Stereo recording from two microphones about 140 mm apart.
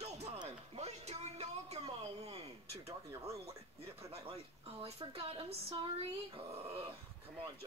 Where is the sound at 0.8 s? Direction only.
50° right (ahead or behind).